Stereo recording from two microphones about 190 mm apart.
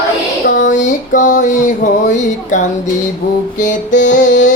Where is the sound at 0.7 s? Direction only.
40° left (ahead or behind).